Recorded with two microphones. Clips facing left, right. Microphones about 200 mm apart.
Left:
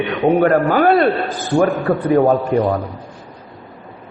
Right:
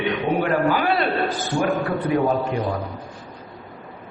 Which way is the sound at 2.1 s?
55° left (ahead or behind).